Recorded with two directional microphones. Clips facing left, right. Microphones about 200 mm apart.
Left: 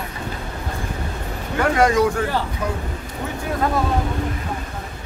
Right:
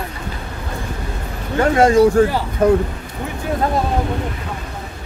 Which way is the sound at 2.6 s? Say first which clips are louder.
Right 13 dB; 50° right (ahead or behind).